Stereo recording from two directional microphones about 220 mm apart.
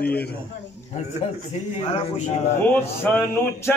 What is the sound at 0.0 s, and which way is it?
Speech, 45° left (ahead or behind).